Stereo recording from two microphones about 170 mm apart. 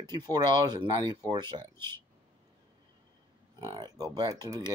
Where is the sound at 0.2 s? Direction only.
25° right (ahead or behind).